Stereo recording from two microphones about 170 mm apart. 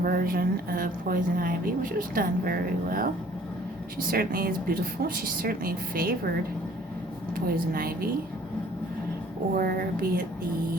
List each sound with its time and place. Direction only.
0.0 s a woman's voice: 60° right (ahead or behind)
4.1 s a woman's voice: 60° right (ahead or behind)
7.3 s a woman's voice: 60° right (ahead or behind)
9.6 s a woman's voice: 60° right (ahead or behind)